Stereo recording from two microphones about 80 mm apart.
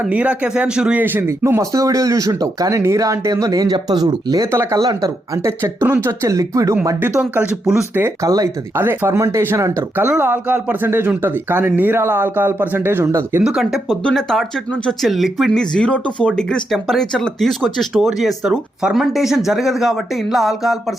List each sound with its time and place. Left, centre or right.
0.0 s speech: centre
1.0 s speech: right
1.7 s speech: right
5.5 s speech: right
8.2 s speech: right
8.7 s speech: right
9.1 s speech: right
13.1 s speech: right
13.4 s speech: centre